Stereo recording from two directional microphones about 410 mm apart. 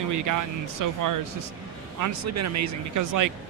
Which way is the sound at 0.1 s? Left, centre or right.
Right.